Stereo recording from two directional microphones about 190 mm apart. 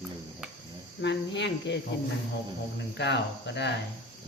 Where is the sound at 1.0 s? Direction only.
65° left (ahead or behind).